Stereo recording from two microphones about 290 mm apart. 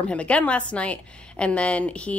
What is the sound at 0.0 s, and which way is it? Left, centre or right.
Speech, centre.